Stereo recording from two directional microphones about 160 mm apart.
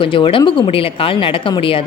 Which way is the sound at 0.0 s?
30° left (ahead or behind).